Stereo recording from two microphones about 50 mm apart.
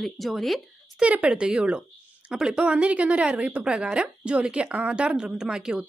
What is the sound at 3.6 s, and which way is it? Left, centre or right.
Speech, centre.